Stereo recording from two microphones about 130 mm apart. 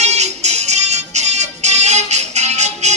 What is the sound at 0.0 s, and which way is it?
Music, 60° right (ahead or behind).